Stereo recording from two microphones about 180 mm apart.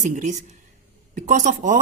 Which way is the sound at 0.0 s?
40° right (ahead or behind).